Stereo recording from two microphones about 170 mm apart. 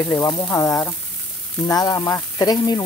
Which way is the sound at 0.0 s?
20° left (ahead or behind).